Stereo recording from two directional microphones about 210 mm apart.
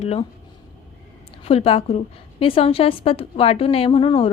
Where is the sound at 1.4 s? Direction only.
25° left (ahead or behind).